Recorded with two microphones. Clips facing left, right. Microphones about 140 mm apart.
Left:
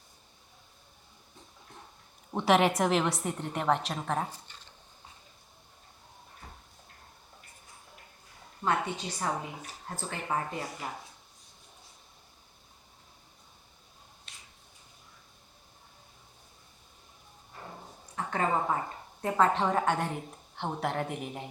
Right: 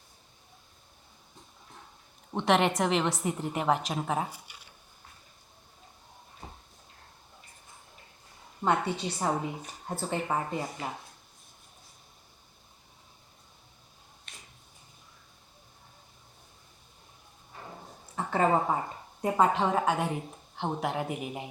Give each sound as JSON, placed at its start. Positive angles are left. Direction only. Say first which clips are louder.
{"t": 2.3, "sound": "a woman's voice", "louder": "left 1 dB", "side_deg": 5}
{"t": 8.6, "sound": "a woman's voice", "louder": "right 3 dB", "side_deg": -25}
{"t": 14.3, "sound": "a sound", "louder": "right 4 dB", "side_deg": -55}
{"t": 18.3, "sound": "a woman's voice", "louder": "right 4 dB", "side_deg": -25}
{"t": 19.2, "sound": "a woman's voice", "louder": "right 1 dB", "side_deg": -10}